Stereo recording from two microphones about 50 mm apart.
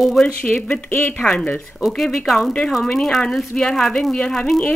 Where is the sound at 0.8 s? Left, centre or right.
Left.